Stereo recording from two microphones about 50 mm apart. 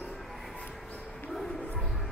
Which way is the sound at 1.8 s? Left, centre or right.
Centre.